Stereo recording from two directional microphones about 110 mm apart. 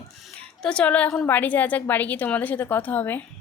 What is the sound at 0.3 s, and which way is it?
A woman's voice, 10° left (ahead or behind).